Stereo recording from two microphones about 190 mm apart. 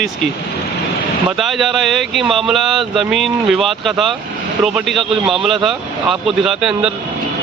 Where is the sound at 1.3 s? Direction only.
Centre (ahead or behind).